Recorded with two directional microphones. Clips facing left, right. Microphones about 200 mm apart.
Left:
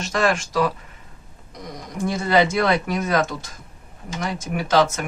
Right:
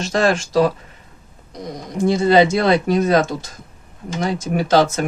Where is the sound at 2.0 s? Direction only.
30° right (ahead or behind).